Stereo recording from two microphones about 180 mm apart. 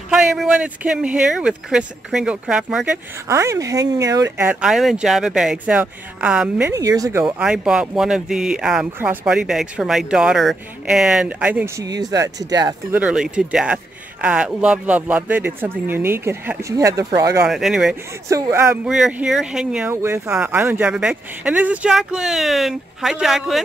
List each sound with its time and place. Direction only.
0.1 s speech: 5° right (ahead or behind)
3.3 s speech: 15° right (ahead or behind)
6.7 s speech: 20° right (ahead or behind)
7.2 s speech: 5° right (ahead or behind); by 12.7 s 20° right (ahead or behind)
12.9 s speech: 5° right (ahead or behind); by 17.5 s 20° right (ahead or behind)
17.5 s speech: centre (ahead or behind)
18.3 s speech: 15° right (ahead or behind)
18.9 s speech: 5° right (ahead or behind)